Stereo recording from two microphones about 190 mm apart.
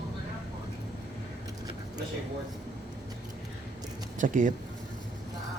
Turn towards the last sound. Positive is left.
turn(degrees=-45)  # may be behind; listen again after turning